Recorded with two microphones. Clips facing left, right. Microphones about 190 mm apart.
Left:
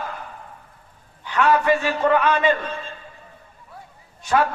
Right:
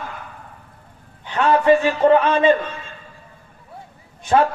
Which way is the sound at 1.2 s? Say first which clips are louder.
Right 2 dB; 25° right (ahead or behind).